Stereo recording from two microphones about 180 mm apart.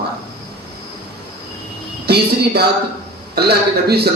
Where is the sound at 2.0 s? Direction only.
65° right (ahead or behind).